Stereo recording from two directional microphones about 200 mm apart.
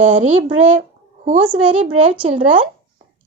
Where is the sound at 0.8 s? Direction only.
35° right (ahead or behind).